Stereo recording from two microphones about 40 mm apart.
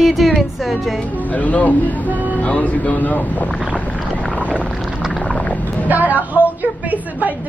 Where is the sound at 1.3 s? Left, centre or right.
Left.